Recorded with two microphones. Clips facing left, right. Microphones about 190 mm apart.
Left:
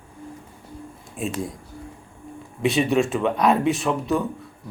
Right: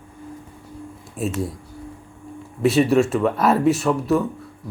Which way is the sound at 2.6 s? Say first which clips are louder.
Right 4 dB; centre (ahead or behind).